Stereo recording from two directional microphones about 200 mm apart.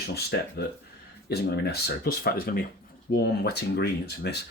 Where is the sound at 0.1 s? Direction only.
55° left (ahead or behind).